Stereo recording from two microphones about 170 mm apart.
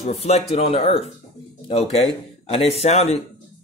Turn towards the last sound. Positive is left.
turn(degrees=40)  # may be behind; listen again after turning